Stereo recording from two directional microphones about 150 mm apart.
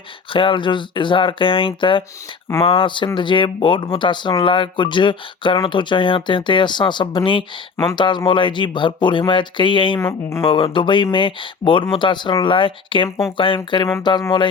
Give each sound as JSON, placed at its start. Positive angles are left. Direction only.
{"t": 0.3, "sound": "speech", "side_deg": 35}
{"t": 10.0, "sound": "speech", "side_deg": 20}
{"t": 10.4, "sound": "speech", "side_deg": 35}